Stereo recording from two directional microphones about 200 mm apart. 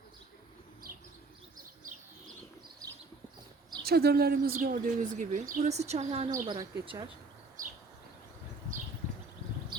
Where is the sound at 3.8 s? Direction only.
50° right (ahead or behind); by 6.4 s 30° right (ahead or behind).